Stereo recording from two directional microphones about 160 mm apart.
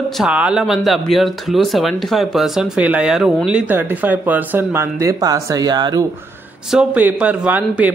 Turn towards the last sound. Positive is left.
turn(degrees=-10)  # may be behind; listen again after turning